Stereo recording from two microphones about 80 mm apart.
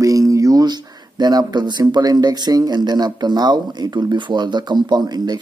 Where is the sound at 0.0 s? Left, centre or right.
Right.